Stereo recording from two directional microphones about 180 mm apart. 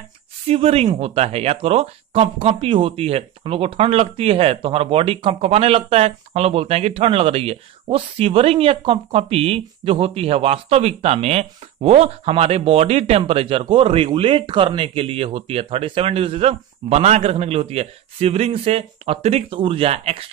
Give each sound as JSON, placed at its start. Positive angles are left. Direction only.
{"t": 0.5, "sound": "speech", "side_deg": -35}